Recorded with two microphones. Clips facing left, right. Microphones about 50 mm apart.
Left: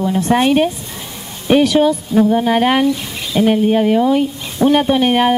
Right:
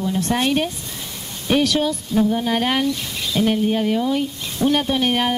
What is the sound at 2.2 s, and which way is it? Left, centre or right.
Speech, left.